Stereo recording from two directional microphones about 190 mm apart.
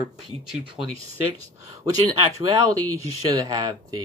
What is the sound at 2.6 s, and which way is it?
Speech, 20° right (ahead or behind).